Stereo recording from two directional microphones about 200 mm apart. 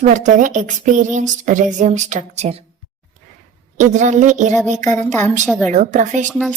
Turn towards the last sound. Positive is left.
turn(degrees=-40)  # may be behind; listen again after turning